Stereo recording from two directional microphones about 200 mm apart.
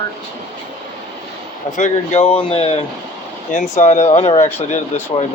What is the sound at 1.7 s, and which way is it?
Speech, 35° left (ahead or behind).